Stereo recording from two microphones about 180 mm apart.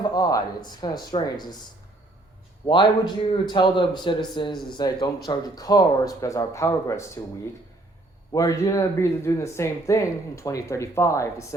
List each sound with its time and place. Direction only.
0.0 s speech: 20° left (ahead or behind)
2.6 s speech: 25° left (ahead or behind)
8.3 s speech: 20° left (ahead or behind)